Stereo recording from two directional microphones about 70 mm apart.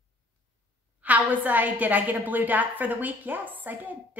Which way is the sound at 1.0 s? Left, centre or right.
Right.